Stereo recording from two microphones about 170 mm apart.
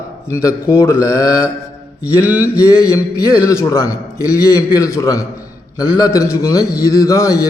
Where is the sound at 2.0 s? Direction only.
10° right (ahead or behind).